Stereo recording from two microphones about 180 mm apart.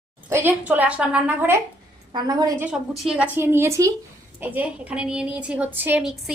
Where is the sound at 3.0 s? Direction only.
5° right (ahead or behind).